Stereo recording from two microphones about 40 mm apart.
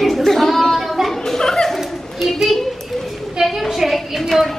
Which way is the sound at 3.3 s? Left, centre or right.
Centre.